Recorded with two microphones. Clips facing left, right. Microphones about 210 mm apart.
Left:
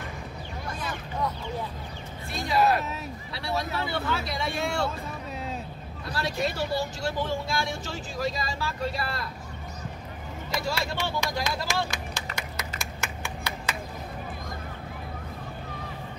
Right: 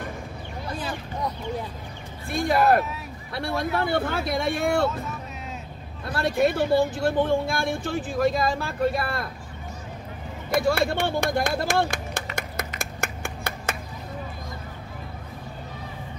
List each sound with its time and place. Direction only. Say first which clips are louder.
0.7 s vehicle: right 4 dB; 30° right (ahead or behind)
2.3 s speech: right 4 dB; 55° right (ahead or behind)
6.0 s speech: right 7 dB; 55° right (ahead or behind)
10.5 s a sound: right 9 dB; 55° right (ahead or behind)